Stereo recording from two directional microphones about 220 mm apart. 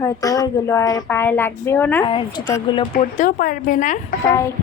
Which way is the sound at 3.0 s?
35° left (ahead or behind).